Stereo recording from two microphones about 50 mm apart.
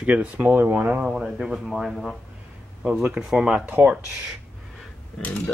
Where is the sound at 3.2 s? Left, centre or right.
Centre.